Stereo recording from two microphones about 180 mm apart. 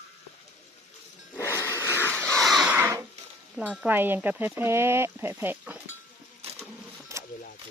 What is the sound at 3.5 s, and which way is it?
Speech, 5° right (ahead or behind).